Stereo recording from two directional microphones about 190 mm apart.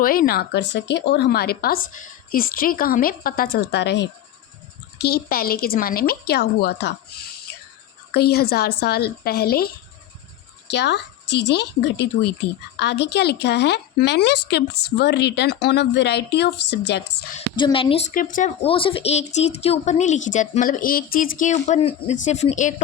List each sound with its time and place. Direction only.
0.0 s a woman's voice: 50° left (ahead or behind)
8.1 s a woman's voice: 55° left (ahead or behind)
17.6 s speech: 25° left (ahead or behind)
18.1 s speech: 45° left (ahead or behind)
18.6 s a woman's voice: 30° left (ahead or behind)